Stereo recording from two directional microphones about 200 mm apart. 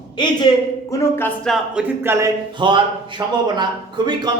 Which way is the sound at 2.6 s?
25° right (ahead or behind).